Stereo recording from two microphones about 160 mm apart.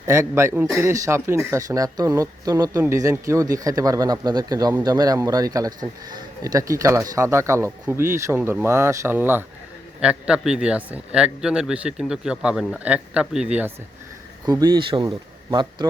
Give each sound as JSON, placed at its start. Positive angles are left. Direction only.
{"t": 0.1, "sound": "speech", "side_deg": -15}
{"t": 14.4, "sound": "speech", "side_deg": -25}